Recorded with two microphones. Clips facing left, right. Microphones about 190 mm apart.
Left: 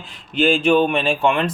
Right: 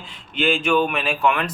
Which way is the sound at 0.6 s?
30° left (ahead or behind).